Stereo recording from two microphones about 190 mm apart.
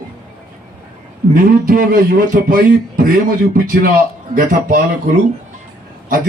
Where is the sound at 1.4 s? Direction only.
45° right (ahead or behind).